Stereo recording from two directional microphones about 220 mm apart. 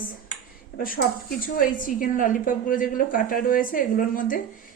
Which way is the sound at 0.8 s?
40° left (ahead or behind).